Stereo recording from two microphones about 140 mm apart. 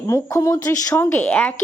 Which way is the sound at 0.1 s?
20° left (ahead or behind).